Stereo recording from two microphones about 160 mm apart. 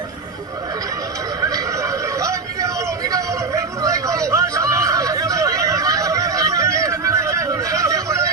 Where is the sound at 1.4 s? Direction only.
20° right (ahead or behind).